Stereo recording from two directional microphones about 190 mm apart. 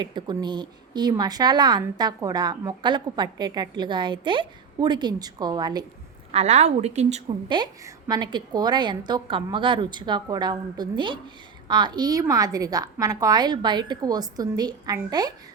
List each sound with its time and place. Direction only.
0.0 s a woman's voice: 25° right (ahead or behind)
6.3 s speech: 35° right (ahead or behind)
7.4 s a woman's voice: 25° right (ahead or behind)